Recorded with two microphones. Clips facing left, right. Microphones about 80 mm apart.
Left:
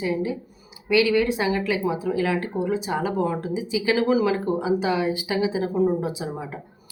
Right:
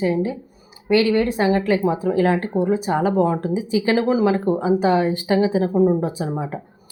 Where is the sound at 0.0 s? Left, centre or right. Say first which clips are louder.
Right 4 dB; right.